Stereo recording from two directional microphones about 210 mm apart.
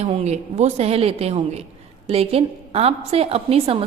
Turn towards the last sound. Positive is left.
turn(degrees=-30)  # may be behind; listen again after turning